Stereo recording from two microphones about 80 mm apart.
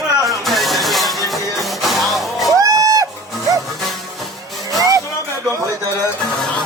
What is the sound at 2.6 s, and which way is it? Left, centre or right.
Music, right.